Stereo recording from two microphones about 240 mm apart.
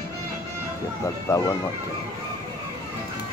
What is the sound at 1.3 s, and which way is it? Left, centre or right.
Speech, centre.